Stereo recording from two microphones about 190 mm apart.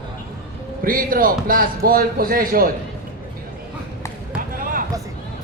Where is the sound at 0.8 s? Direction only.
50° right (ahead or behind).